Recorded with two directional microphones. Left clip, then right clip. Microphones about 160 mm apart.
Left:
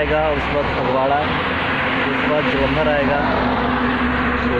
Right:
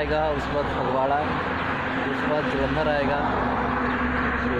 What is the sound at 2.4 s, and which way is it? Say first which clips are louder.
Speech: left 7 dB; 70° right (ahead or behind).